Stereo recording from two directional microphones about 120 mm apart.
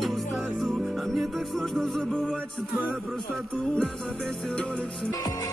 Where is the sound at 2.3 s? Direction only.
15° right (ahead or behind).